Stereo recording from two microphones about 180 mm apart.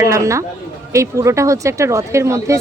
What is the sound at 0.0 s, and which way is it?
Speech, 15° right (ahead or behind).